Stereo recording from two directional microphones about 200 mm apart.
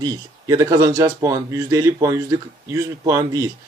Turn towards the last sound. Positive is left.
turn(degrees=-15)  # may be behind; listen again after turning